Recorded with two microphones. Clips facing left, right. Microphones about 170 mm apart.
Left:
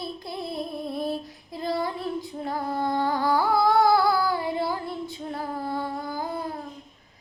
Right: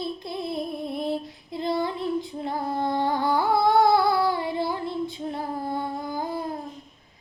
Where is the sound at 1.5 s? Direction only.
25° right (ahead or behind).